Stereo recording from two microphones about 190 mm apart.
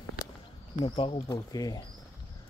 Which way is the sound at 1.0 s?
30° left (ahead or behind).